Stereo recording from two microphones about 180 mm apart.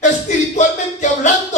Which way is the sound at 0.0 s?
40° left (ahead or behind).